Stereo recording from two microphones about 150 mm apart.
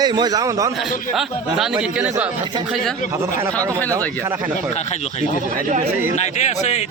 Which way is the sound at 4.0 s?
10° left (ahead or behind).